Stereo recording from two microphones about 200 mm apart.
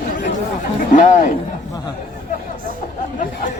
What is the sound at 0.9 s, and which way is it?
Speech, 40° left (ahead or behind).